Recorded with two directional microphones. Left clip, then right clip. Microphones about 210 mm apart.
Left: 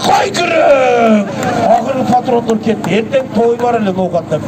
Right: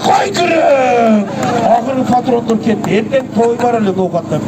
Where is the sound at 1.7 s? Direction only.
25° left (ahead or behind).